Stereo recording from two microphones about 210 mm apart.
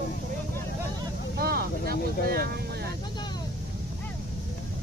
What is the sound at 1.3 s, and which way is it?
Speech, 45° right (ahead or behind).